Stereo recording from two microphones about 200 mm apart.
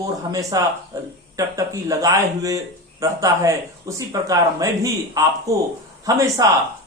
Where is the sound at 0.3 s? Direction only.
15° right (ahead or behind).